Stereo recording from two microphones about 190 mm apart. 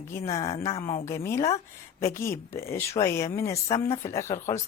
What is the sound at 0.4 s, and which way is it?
Speech, 30° left (ahead or behind).